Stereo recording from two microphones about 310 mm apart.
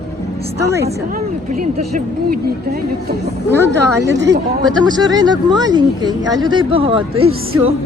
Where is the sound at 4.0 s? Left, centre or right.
Right.